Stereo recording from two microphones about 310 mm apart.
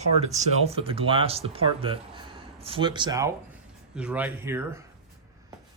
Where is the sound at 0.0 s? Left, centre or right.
Right.